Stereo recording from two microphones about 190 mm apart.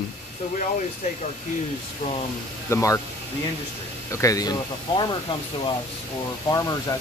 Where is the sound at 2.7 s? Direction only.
15° left (ahead or behind).